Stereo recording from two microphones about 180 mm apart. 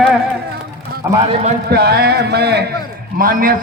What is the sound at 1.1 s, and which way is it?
Speech, 15° right (ahead or behind).